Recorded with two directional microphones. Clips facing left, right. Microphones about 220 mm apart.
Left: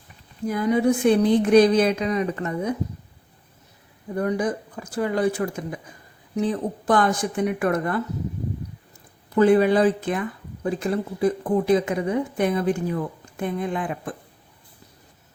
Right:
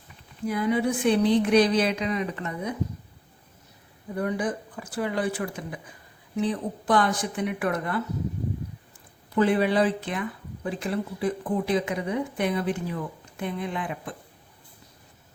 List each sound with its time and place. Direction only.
0.4 s speech: 45° left (ahead or behind)
4.2 s speech: 40° left (ahead or behind)
9.3 s speech: 45° left (ahead or behind)